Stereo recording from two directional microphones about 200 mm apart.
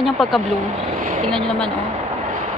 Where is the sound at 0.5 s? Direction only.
40° right (ahead or behind).